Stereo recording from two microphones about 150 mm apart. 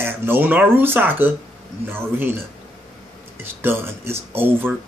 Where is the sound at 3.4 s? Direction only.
15° right (ahead or behind).